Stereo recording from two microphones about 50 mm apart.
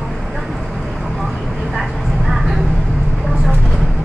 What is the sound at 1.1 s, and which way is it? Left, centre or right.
Vehicle, centre.